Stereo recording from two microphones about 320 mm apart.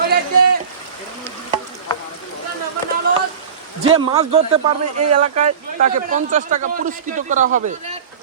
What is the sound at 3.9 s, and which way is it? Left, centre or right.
A man's voice, centre.